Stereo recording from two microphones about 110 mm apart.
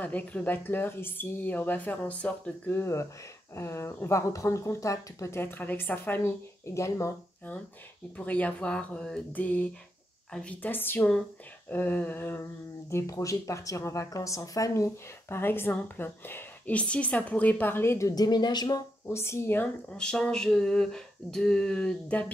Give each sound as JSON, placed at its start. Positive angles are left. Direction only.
{"t": 0.0, "sound": "speech", "side_deg": 15}
{"t": 2.7, "sound": "speech", "side_deg": 25}
{"t": 8.2, "sound": "speech", "side_deg": 10}
{"t": 19.0, "sound": "speech", "side_deg": 25}